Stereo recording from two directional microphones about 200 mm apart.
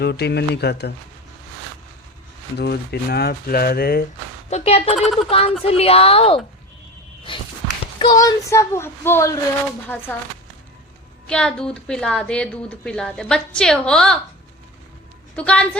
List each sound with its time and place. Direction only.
0.0 s speech: 55° left (ahead or behind)
2.6 s speech: 55° left (ahead or behind)
4.4 s a woman's voice: 30° left (ahead or behind)
4.9 s a woman's voice: centre (ahead or behind)
5.6 s a woman's voice: 30° left (ahead or behind)
7.9 s a woman's voice: 20° left (ahead or behind)
11.3 s a woman's voice: 5° left (ahead or behind)
15.4 s a woman's voice: 5° left (ahead or behind)